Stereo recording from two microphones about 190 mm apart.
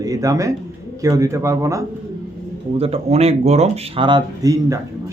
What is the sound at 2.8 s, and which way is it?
Speech, 30° right (ahead or behind).